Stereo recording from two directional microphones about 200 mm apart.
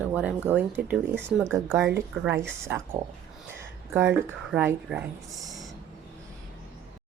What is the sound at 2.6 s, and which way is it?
Speech, 10° right (ahead or behind).